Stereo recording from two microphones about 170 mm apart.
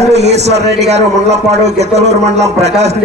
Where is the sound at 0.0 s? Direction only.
40° right (ahead or behind).